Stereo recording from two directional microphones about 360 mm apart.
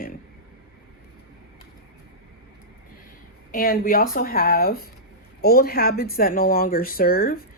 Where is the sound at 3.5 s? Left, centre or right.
Left.